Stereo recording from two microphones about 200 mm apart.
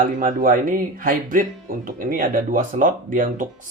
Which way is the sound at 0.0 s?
40° right (ahead or behind).